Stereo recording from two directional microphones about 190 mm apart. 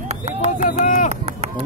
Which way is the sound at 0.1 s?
35° right (ahead or behind).